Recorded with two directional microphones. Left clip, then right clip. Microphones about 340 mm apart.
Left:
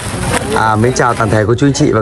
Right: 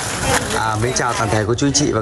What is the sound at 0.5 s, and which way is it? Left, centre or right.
Speech, centre.